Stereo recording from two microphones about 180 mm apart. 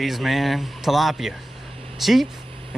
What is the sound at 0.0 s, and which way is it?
Speech, centre (ahead or behind).